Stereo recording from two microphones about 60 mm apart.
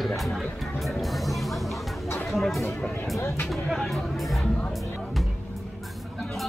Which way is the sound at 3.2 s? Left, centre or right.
Left.